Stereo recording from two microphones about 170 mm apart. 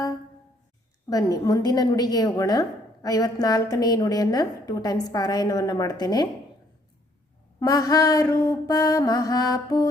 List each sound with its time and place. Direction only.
1.1 s a woman's voice: 20° left (ahead or behind)
7.6 s a woman's voice: 20° left (ahead or behind)